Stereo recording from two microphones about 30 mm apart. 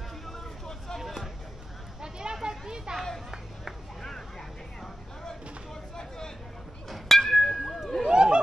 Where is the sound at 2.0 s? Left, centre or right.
Right.